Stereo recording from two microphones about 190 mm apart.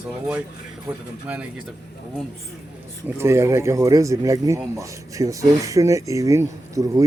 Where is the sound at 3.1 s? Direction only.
15° right (ahead or behind).